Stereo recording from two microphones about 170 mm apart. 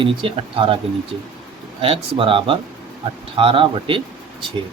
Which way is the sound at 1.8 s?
30° right (ahead or behind).